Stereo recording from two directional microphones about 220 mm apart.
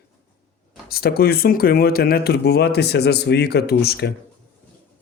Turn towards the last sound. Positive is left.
turn(degrees=50)  # may be behind; listen again after turning